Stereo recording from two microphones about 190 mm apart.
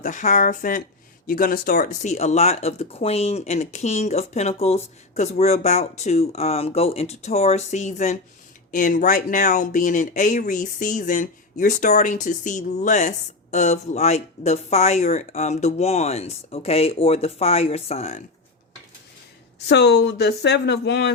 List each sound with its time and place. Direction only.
0.0 s speech: 40° left (ahead or behind)
19.6 s speech: 60° left (ahead or behind)